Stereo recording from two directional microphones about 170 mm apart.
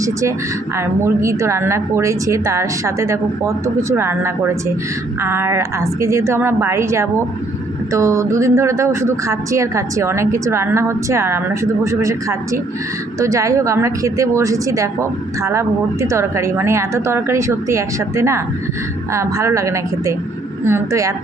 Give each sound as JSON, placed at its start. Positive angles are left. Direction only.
{"t": 0.0, "sound": "a woman's voice", "side_deg": -20}